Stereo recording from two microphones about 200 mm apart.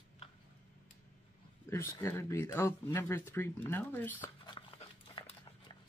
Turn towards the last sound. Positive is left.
turn(degrees=25)  # may be behind; listen again after turning